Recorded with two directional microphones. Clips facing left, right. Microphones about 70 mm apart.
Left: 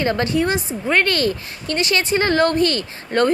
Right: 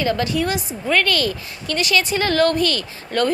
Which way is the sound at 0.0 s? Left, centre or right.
Left.